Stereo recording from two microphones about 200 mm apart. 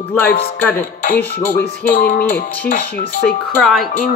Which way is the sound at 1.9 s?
50° left (ahead or behind).